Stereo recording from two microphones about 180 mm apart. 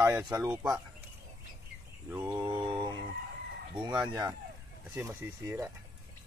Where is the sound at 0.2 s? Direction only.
5° right (ahead or behind).